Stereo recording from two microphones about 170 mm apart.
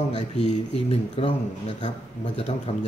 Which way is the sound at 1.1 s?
30° left (ahead or behind).